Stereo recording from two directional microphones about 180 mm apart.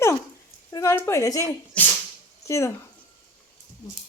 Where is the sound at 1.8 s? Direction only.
10° left (ahead or behind).